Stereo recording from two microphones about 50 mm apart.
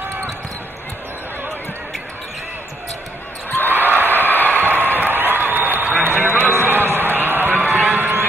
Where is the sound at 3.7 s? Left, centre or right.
Right.